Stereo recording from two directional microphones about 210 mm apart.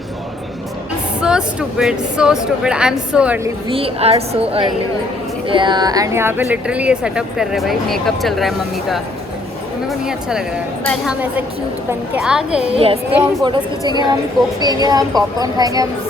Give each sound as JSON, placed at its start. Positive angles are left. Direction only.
{"t": 1.2, "sound": "speech", "side_deg": -5}
{"t": 3.7, "sound": "speech", "side_deg": -25}
{"t": 10.1, "sound": "speech", "side_deg": -5}
{"t": 11.9, "sound": "speech", "side_deg": -5}
{"t": 12.7, "sound": "speech", "side_deg": -25}